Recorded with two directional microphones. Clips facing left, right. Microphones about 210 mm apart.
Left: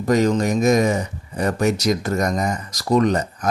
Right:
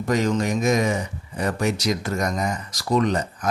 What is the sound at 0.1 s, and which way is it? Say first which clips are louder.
A man's voice: left 4 dB; 40° left (ahead or behind).